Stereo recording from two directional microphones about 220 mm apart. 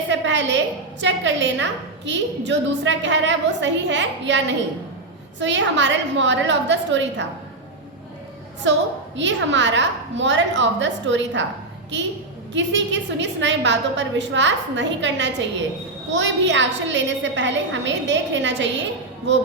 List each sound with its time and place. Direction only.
0.1 s a sound: 55° right (ahead or behind)
1.0 s a woman's voice: 55° right (ahead or behind)
8.7 s a woman's voice: 55° right (ahead or behind)
12.5 s a woman's voice: 55° right (ahead or behind)